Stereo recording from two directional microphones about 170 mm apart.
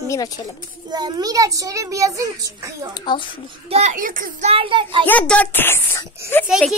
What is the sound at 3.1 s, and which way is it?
Speech, 25° left (ahead or behind).